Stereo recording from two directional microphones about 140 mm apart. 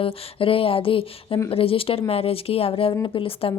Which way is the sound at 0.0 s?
40° left (ahead or behind).